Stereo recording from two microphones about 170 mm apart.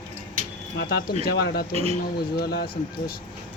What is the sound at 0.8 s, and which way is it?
Speech, 70° left (ahead or behind).